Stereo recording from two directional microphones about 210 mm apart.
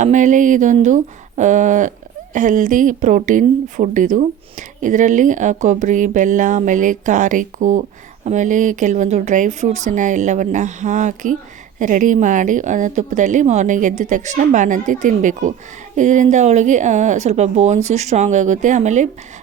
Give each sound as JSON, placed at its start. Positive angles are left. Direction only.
{"t": 0.0, "sound": "speech", "side_deg": -35}